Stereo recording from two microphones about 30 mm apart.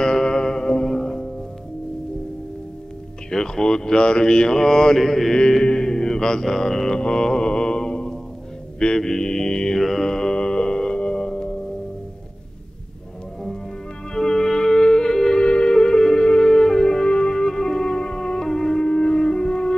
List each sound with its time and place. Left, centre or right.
0.0 s music: left
3.3 s speech: left
4.9 s mantra: centre
5.6 s mantra: left
7.0 s mantra: left
9.8 s mantra: centre
10.0 s music: left
14.1 s music: centre
15.4 s music: left
15.7 s music: left
17.5 s music: centre
18.8 s music: left